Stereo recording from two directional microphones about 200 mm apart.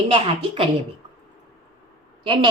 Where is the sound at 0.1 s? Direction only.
25° right (ahead or behind).